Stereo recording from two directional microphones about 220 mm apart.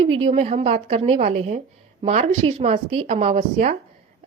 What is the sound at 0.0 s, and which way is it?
A woman's voice, 25° right (ahead or behind).